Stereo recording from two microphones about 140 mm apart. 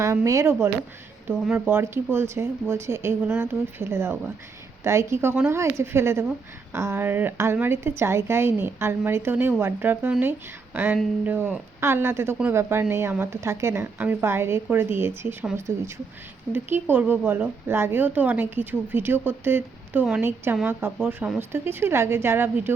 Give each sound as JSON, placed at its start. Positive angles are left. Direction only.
{"t": 0.0, "sound": "a woman's voice", "side_deg": -20}